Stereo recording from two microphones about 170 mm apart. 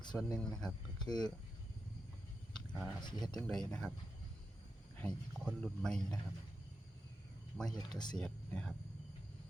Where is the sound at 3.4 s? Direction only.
5° left (ahead or behind).